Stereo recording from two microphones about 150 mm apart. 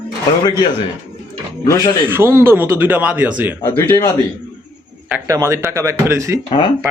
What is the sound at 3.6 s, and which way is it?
Speech, 20° left (ahead or behind).